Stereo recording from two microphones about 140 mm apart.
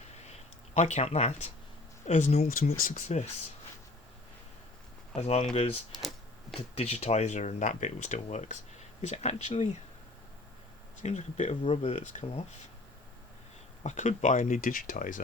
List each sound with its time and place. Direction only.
0.2 s a sound: 50° left (ahead or behind)
2.0 s speech: 55° left (ahead or behind)
5.1 s speech: 45° left (ahead or behind)
5.9 s a sound: centre (ahead or behind)
6.5 s speech: 45° left (ahead or behind)
11.0 s speech: 55° left (ahead or behind)
13.8 s speech: 55° left (ahead or behind)